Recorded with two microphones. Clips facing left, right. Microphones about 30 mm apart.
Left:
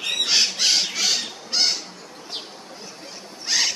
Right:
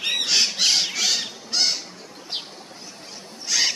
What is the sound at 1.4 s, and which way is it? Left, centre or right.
Bird, centre.